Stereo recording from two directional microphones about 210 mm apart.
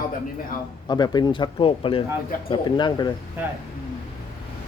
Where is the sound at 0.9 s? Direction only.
20° left (ahead or behind).